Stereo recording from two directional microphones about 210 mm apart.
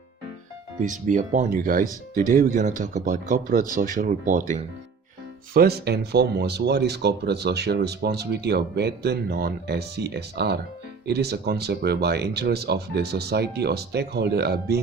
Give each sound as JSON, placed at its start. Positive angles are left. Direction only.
{"t": 0.8, "sound": "speech", "side_deg": -35}
{"t": 5.5, "sound": "speech", "side_deg": -50}